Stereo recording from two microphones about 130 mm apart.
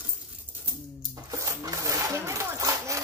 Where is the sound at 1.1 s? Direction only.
25° right (ahead or behind).